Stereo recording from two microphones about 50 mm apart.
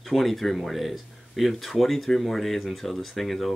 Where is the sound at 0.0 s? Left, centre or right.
Centre.